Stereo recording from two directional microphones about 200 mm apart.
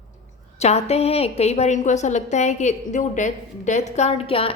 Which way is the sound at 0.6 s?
30° left (ahead or behind).